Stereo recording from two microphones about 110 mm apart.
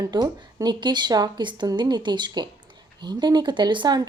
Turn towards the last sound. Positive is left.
turn(degrees=-40)  # may be behind; listen again after turning